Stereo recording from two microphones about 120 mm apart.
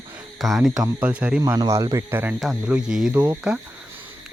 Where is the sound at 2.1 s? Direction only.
15° right (ahead or behind).